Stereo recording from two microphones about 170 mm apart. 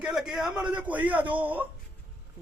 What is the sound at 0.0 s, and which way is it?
A man's voice, 5° right (ahead or behind).